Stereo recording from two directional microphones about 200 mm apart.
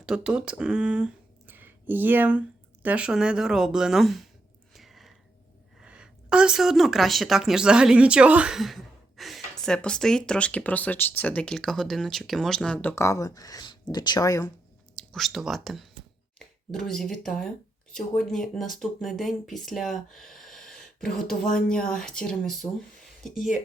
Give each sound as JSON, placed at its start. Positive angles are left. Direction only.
{"t": 0.0, "sound": "speech", "side_deg": -5}
{"t": 4.7, "sound": "a sound", "side_deg": 0}
{"t": 5.8, "sound": "speech", "side_deg": -5}
{"t": 15.1, "sound": "speech", "side_deg": 0}
{"t": 16.9, "sound": "speech", "side_deg": 0}
{"t": 21.4, "sound": "speech", "side_deg": 45}
{"t": 21.8, "sound": "speech", "side_deg": 5}